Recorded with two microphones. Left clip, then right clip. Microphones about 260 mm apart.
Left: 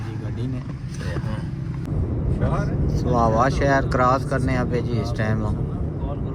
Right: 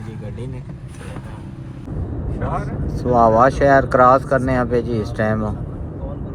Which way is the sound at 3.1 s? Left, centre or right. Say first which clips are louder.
Right 7 dB; right.